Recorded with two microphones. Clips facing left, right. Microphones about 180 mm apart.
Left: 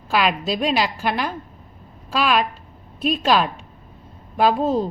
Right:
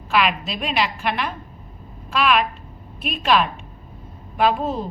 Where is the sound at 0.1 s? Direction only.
35° left (ahead or behind).